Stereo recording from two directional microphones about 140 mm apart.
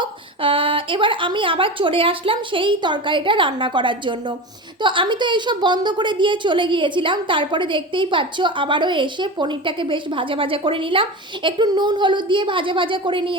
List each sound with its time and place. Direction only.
0.0 s a woman's voice: 40° right (ahead or behind)